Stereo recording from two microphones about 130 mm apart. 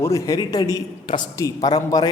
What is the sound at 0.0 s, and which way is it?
A man's voice, 25° left (ahead or behind).